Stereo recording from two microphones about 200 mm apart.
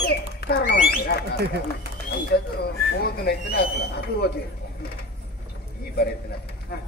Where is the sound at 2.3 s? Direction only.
55° left (ahead or behind).